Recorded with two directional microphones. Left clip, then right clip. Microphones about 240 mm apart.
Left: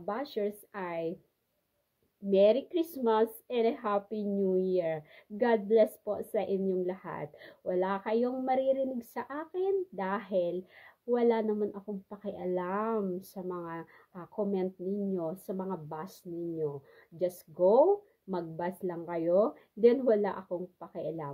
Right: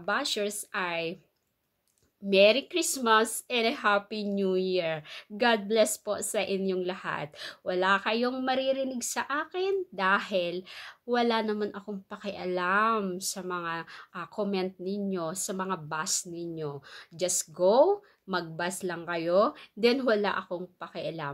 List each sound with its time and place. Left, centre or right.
0.0 s a woman's voice: centre
2.2 s a woman's voice: centre
18.3 s a woman's voice: centre